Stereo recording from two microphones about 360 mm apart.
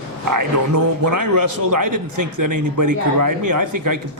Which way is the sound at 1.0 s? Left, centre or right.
Right.